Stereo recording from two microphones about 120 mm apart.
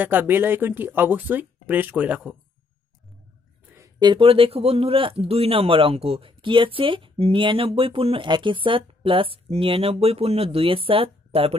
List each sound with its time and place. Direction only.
0.0 s speech: 15° right (ahead or behind)
4.0 s speech: 45° right (ahead or behind)